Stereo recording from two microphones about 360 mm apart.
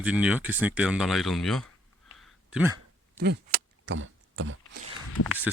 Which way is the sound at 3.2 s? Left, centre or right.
Right.